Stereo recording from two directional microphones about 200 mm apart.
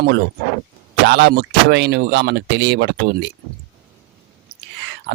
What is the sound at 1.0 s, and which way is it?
Speech, 55° right (ahead or behind).